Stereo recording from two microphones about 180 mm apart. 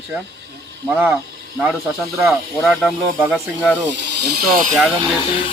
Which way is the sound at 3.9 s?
75° right (ahead or behind).